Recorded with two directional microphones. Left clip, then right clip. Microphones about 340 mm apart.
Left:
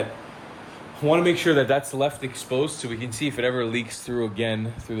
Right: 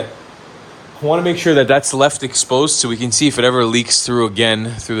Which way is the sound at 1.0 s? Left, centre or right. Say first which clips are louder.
Right 5 dB; centre.